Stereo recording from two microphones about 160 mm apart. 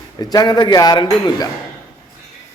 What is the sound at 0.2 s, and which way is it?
A man's voice, 25° left (ahead or behind).